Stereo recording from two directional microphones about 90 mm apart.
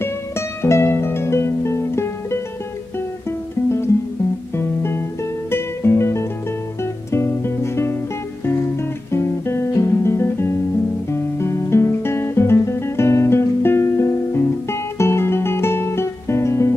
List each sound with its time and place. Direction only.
0.6 s music: 30° left (ahead or behind)
4.6 s music: 25° left (ahead or behind)
9.1 s guitar: 30° left (ahead or behind)